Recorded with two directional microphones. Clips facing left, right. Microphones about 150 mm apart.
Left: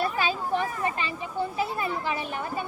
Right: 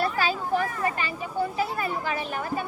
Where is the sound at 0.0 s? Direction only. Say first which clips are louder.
Right 1 dB; 20° left (ahead or behind).